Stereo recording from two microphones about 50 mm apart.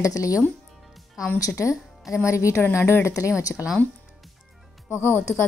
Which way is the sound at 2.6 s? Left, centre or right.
Left.